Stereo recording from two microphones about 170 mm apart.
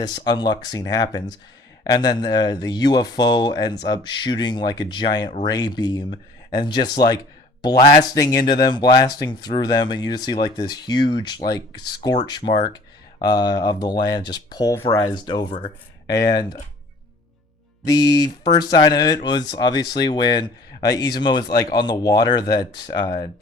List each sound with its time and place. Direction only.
0.3 s speech: 25° left (ahead or behind)
17.8 s speech: 25° left (ahead or behind)